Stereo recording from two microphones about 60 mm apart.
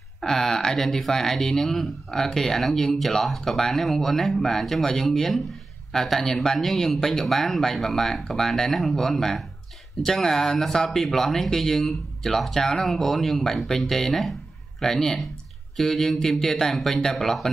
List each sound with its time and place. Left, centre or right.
0.2 s speech: centre